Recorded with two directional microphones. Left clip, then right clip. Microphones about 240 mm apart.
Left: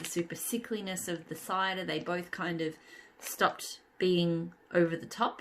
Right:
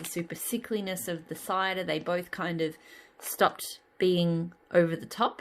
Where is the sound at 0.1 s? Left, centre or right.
Right.